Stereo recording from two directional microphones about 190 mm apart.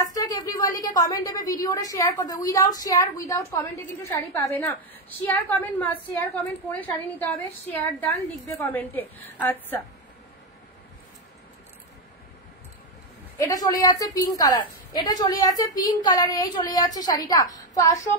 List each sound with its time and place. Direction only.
0.0 s a sound: 20° left (ahead or behind)
0.6 s a woman's voice: 20° left (ahead or behind)
13.4 s a woman's voice: 20° left (ahead or behind)